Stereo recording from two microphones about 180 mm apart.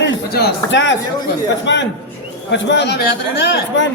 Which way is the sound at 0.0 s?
70° left (ahead or behind).